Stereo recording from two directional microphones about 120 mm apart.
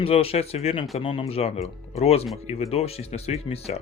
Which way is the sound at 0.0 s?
55° left (ahead or behind).